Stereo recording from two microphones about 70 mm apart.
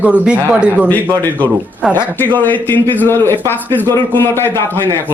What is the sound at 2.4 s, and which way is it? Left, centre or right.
A man's voice, left.